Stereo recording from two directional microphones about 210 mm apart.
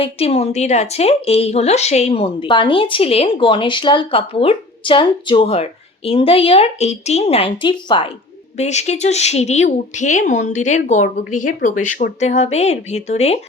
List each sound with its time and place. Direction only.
0.0 s a woman's voice: 30° left (ahead or behind)